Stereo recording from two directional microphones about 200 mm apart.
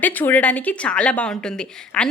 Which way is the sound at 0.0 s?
10° left (ahead or behind).